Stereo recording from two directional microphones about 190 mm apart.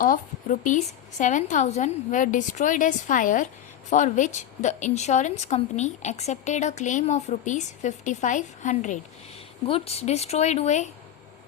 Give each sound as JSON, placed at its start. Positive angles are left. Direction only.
{"t": 0.6, "sound": "a woman's voice", "side_deg": 40}